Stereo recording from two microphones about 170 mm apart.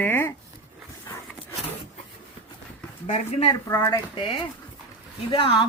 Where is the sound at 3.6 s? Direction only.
15° left (ahead or behind).